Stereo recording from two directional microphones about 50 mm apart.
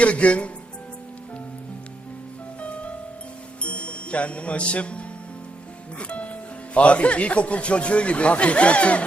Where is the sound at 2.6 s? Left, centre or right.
Left.